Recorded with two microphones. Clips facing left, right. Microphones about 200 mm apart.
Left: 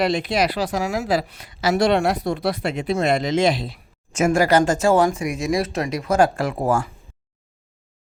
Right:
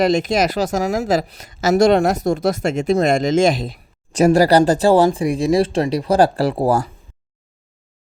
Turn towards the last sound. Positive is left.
turn(degrees=-35)  # may be behind; listen again after turning